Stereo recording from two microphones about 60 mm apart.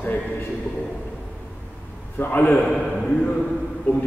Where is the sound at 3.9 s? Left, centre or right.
Left.